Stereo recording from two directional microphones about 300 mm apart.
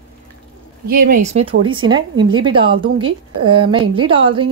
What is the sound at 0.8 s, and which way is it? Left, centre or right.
Speech, right.